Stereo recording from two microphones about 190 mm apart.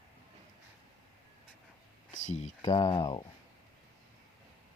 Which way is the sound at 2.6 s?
25° left (ahead or behind).